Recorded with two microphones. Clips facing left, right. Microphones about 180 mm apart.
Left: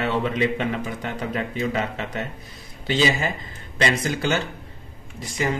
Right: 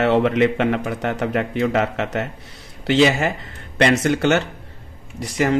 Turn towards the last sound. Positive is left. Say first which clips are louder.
# right 5 dB
turn(degrees=-70)  # may be behind; listen again after turning